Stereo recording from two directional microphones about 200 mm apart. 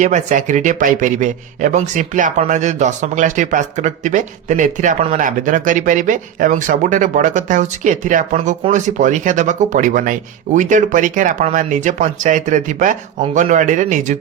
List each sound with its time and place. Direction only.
0.0 s speech: 40° right (ahead or behind)